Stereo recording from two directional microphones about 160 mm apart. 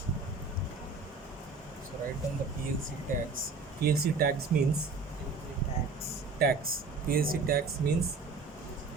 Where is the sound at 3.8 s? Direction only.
70° right (ahead or behind).